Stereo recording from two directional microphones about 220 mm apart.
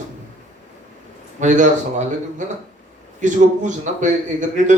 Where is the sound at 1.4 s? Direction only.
35° right (ahead or behind).